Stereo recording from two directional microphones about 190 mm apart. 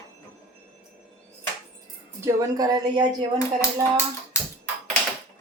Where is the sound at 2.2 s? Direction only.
20° right (ahead or behind).